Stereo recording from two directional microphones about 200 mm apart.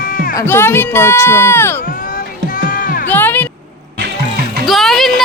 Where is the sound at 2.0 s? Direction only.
45° left (ahead or behind).